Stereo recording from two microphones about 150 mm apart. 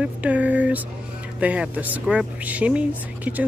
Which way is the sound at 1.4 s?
10° right (ahead or behind).